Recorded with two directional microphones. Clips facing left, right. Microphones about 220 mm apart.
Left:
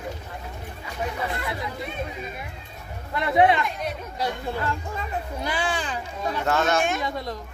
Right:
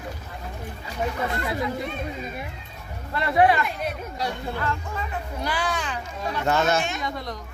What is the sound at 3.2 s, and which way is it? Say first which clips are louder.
Speech: even; 20° left (ahead or behind).